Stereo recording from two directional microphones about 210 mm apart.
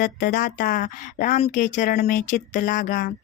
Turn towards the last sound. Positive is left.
turn(degrees=40)  # may be behind; listen again after turning